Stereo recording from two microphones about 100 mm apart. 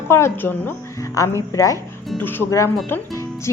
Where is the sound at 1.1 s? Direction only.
35° left (ahead or behind).